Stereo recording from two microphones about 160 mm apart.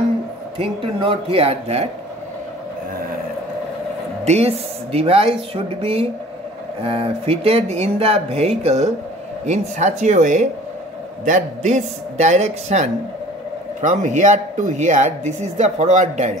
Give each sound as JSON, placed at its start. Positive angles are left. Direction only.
{"t": 0.6, "sound": "speech", "side_deg": -35}
{"t": 4.2, "sound": "a woman's voice", "side_deg": -40}